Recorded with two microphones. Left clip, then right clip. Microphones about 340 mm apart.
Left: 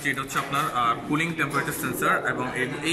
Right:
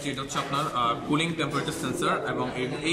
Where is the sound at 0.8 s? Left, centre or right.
Centre.